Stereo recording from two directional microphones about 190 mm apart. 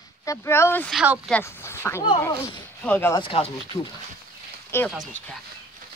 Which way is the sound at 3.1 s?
30° left (ahead or behind).